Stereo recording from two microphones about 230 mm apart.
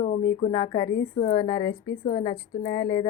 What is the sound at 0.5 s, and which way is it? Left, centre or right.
A woman's voice, centre.